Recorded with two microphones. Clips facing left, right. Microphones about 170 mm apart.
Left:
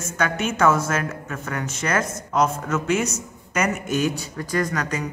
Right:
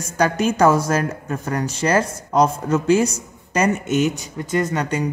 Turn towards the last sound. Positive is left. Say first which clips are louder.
# right 3 dB
turn(degrees=-30)  # may be behind; listen again after turning